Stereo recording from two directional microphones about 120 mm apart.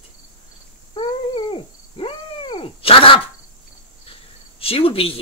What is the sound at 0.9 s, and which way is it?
Wild animals, 45° left (ahead or behind).